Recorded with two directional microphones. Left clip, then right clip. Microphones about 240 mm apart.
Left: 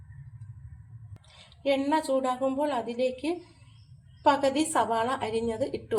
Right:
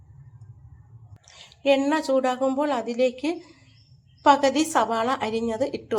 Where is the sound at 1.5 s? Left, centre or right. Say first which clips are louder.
Right 5 dB; right.